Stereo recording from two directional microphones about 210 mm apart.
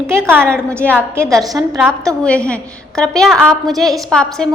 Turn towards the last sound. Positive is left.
turn(degrees=5)  # may be behind; listen again after turning